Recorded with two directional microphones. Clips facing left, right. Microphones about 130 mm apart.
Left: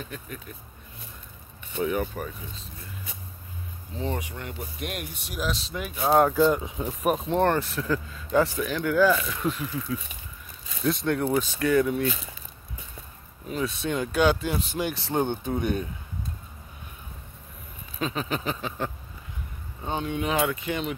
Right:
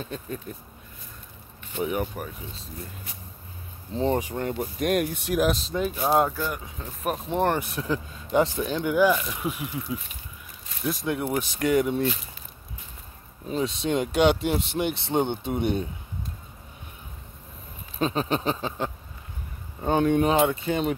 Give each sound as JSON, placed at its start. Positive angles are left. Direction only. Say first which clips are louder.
{"t": 0.0, "sound": "speech", "louder": "right 4 dB", "side_deg": -30}
{"t": 1.9, "sound": "speech", "louder": "left 1 dB", "side_deg": -10}
{"t": 3.9, "sound": "speech", "louder": "right 7 dB", "side_deg": -35}
{"t": 6.0, "sound": "speech", "louder": "left 5 dB", "side_deg": 0}
{"t": 7.2, "sound": "speech", "louder": "right 2 dB", "side_deg": -10}
{"t": 10.8, "sound": "speech", "louder": "left 2 dB", "side_deg": -5}
{"t": 11.3, "sound": "speech", "louder": "right 1 dB", "side_deg": -20}
{"t": 13.5, "sound": "speech", "louder": "right 3 dB", "side_deg": -25}
{"t": 17.9, "sound": "speech", "louder": "right 4 dB", "side_deg": -35}
{"t": 19.8, "sound": "speech", "louder": "right 8 dB", "side_deg": -50}
{"t": 20.2, "sound": "speech", "louder": "right 4 dB", "side_deg": -30}